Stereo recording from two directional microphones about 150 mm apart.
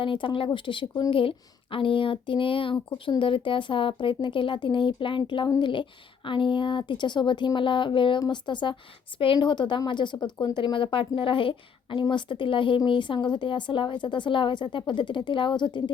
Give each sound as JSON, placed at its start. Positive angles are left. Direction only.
{"t": 0.0, "sound": "a woman's voice", "side_deg": 35}